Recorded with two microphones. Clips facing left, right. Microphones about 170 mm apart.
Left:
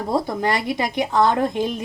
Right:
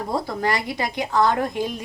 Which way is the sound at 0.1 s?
20° left (ahead or behind).